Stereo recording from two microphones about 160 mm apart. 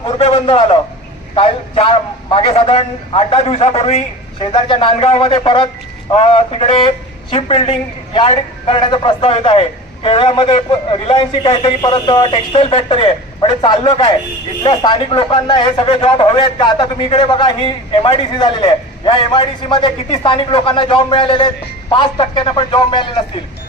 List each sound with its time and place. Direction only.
0.0 s a man's voice: 35° left (ahead or behind)